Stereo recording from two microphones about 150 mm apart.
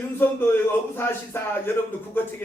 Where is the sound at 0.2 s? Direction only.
15° left (ahead or behind).